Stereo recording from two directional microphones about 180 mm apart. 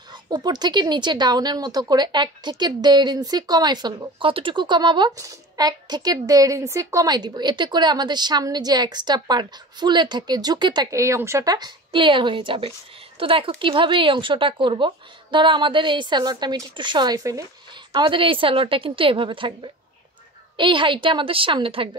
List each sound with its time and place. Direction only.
0.1 s speech: 25° right (ahead or behind)